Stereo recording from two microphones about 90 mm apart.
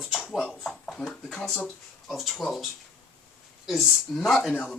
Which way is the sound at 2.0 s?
Centre (ahead or behind).